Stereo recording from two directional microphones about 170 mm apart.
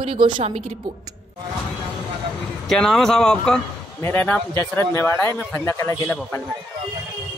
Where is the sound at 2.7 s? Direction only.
5° left (ahead or behind).